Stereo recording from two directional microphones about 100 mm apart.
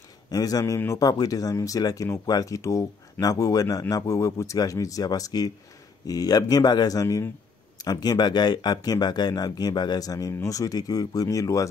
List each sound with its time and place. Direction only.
0.3 s speech: 40° left (ahead or behind)